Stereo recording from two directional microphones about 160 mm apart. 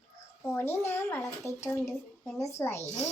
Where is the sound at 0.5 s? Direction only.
15° left (ahead or behind).